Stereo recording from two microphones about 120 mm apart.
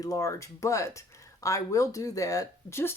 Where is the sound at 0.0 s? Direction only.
25° left (ahead or behind).